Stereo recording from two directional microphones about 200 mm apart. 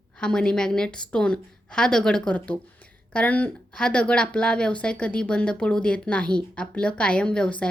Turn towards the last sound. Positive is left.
turn(degrees=5)  # may be behind; listen again after turning